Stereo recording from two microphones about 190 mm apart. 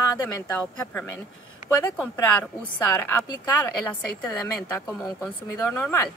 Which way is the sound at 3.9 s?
15° left (ahead or behind).